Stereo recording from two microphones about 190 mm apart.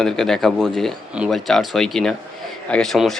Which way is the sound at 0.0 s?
Centre (ahead or behind).